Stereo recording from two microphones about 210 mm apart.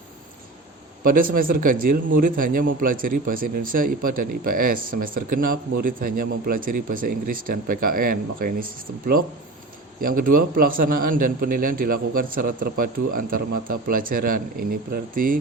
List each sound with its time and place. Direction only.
1.0 s a man's voice: 40° right (ahead or behind)
10.0 s a man's voice: 40° right (ahead or behind)